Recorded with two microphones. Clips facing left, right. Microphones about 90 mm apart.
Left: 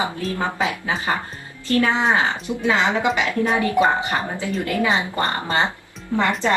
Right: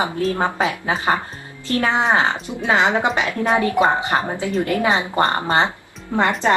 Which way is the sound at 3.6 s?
25° right (ahead or behind).